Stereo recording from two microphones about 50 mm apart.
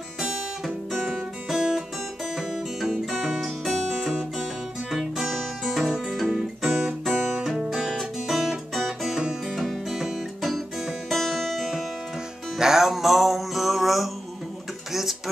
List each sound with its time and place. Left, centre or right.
0.9 s music: centre
1.5 s music: centre
4.9 s music: centre
6.2 s guitar: centre
7.1 s music: centre
9.2 s music: centre
9.6 s music: centre
14.9 s a sound: centre